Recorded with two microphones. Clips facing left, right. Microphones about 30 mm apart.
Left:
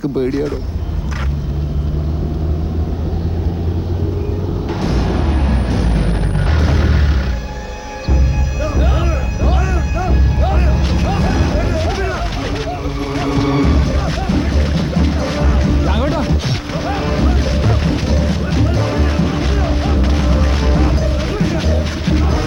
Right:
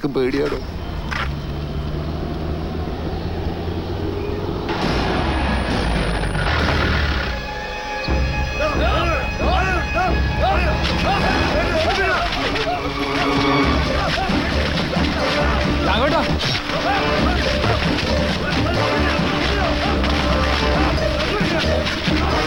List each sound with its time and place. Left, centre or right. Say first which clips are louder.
0.2 s speech: left 1 dB; right
4.7 s vehicle: even; right
8.6 s music: right 1 dB; right